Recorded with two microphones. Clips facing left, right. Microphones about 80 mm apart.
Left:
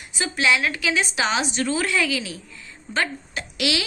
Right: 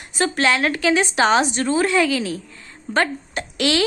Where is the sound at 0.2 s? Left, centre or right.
Right.